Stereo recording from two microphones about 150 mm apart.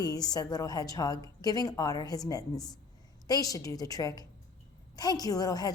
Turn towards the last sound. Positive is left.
turn(degrees=25)  # may be behind; listen again after turning